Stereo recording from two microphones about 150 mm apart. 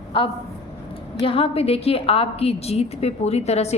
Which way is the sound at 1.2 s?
40° left (ahead or behind).